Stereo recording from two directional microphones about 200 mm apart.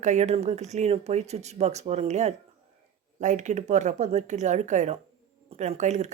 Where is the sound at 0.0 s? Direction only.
35° right (ahead or behind).